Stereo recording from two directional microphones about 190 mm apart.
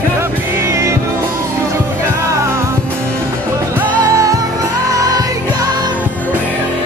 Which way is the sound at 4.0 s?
15° right (ahead or behind).